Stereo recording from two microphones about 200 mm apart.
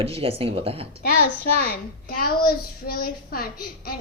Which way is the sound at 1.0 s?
50° left (ahead or behind).